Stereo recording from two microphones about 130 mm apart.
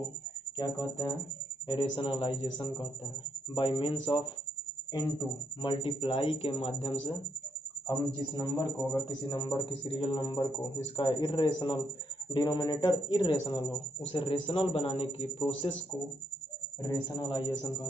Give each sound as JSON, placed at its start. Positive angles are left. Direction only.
{"t": 0.5, "sound": "a man's voice", "side_deg": 35}
{"t": 5.6, "sound": "speech", "side_deg": 40}
{"t": 7.9, "sound": "a man's voice", "side_deg": 30}
{"t": 16.8, "sound": "a man's voice", "side_deg": 30}